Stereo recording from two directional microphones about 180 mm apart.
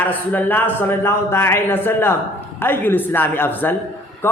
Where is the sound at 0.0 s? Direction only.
10° left (ahead or behind).